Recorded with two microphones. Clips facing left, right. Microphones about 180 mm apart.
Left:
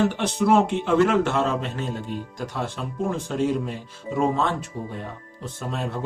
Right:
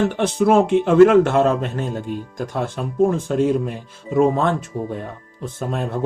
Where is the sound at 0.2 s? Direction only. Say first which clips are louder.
Right 4 dB; 55° right (ahead or behind).